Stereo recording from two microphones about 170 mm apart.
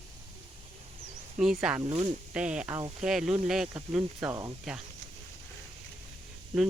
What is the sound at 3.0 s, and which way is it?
Speech, 5° right (ahead or behind).